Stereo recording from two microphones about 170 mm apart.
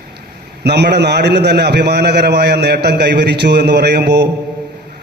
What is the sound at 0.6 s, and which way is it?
A man's voice, 75° right (ahead or behind).